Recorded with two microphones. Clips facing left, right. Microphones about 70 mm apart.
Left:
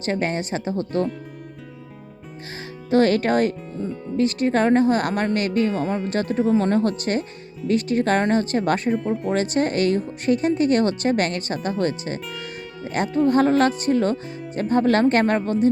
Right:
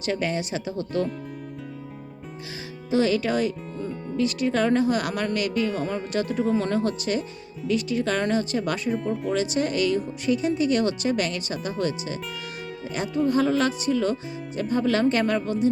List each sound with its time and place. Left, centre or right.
0.0 s a woman's voice: left
2.9 s a woman's voice: left